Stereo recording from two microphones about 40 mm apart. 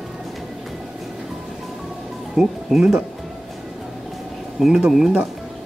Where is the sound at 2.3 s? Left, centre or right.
Centre.